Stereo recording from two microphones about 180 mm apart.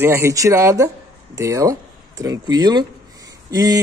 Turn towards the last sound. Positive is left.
turn(degrees=-20)  # may be behind; listen again after turning